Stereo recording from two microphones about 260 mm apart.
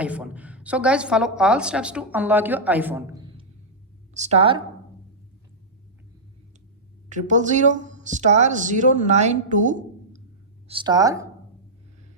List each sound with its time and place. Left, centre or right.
0.0 s a woman's voice: centre
4.1 s speech: right
7.1 s speech: right
10.7 s speech: centre